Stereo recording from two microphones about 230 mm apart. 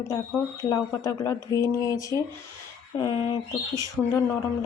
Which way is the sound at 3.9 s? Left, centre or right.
Centre.